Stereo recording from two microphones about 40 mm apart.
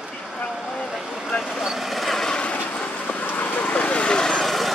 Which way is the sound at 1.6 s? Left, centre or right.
Centre.